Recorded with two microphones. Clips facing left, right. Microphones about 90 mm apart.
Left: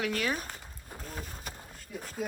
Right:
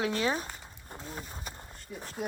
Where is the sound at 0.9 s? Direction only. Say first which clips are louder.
Even; 25° right (ahead or behind).